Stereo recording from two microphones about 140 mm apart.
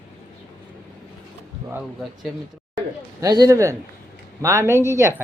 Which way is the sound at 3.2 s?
25° right (ahead or behind).